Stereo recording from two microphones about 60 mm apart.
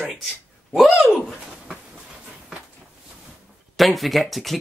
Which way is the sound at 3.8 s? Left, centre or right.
Centre.